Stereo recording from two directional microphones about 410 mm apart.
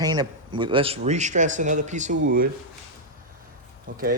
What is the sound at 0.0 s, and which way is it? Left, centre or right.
Speech, centre.